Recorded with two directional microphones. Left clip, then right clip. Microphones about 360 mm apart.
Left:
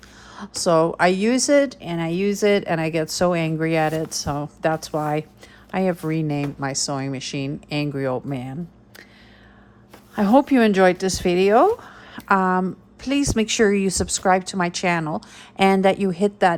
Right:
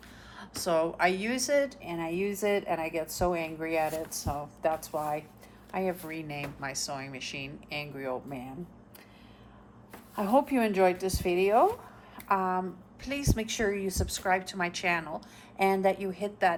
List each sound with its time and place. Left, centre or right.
0.3 s a woman's voice: centre
10.2 s a woman's voice: left